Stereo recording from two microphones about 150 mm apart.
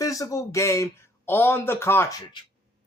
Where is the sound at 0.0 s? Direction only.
20° left (ahead or behind).